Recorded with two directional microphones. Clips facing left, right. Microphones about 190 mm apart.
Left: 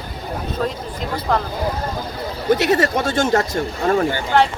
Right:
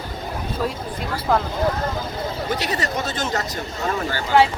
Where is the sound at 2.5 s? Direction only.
50° left (ahead or behind).